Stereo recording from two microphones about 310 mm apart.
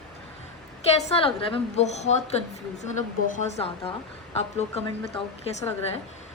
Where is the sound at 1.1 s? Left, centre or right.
Centre.